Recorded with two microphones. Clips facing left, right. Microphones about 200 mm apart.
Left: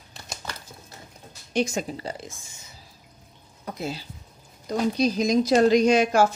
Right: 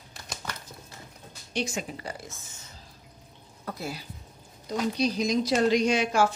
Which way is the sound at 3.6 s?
20° left (ahead or behind).